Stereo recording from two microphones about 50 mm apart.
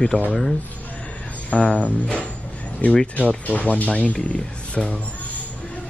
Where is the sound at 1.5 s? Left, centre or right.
Left.